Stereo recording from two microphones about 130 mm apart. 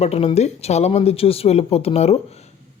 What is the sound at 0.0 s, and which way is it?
Speech, 50° left (ahead or behind).